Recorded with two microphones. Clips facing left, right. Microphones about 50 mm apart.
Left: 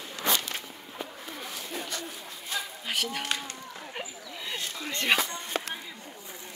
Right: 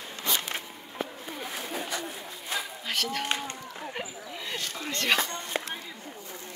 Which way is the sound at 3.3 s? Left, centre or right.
Right.